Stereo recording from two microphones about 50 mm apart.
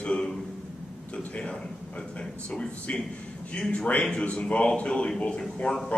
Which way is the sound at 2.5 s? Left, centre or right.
Centre.